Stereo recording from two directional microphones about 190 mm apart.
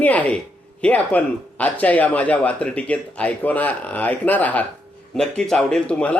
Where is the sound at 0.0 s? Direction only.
10° left (ahead or behind).